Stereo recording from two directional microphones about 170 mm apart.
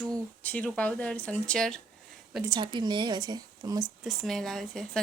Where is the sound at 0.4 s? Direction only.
10° left (ahead or behind).